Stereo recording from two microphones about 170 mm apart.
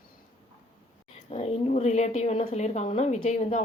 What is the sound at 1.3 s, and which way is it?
A woman's voice, 40° left (ahead or behind).